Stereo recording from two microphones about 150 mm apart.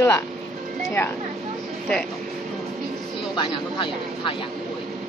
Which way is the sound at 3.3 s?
35° left (ahead or behind).